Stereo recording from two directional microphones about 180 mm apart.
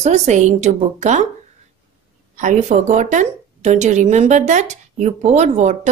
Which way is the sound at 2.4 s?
45° right (ahead or behind).